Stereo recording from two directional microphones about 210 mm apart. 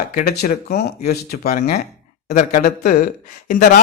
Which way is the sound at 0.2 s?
45° left (ahead or behind).